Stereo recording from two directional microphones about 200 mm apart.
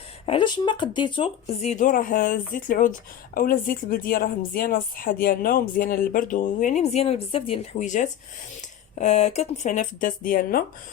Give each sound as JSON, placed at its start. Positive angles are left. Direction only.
{"t": 0.3, "sound": "a woman's voice", "side_deg": 25}